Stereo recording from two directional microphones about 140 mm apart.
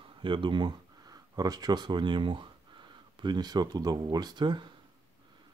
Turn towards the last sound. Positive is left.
turn(degrees=-35)  # may be behind; listen again after turning